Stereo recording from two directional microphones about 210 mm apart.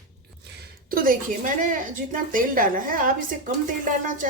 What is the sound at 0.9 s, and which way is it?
Speech, 40° right (ahead or behind).